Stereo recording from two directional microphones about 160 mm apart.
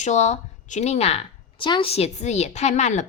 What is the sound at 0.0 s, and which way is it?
A woman's voice, 45° left (ahead or behind).